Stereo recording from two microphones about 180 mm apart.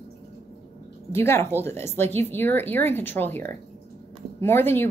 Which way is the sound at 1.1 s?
15° left (ahead or behind).